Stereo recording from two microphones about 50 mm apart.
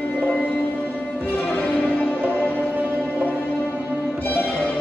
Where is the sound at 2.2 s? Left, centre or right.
Left.